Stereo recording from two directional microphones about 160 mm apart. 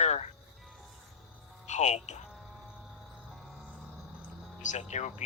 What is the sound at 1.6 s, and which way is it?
Speech, 45° left (ahead or behind).